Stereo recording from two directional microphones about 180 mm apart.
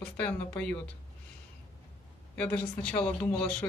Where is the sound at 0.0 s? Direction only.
10° left (ahead or behind).